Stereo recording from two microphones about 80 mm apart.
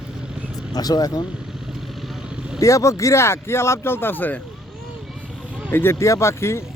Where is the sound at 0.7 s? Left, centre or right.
Left.